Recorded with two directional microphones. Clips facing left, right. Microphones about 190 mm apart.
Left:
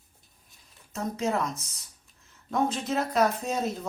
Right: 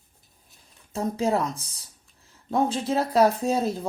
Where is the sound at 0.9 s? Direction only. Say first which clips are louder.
Right 4 dB; 30° right (ahead or behind).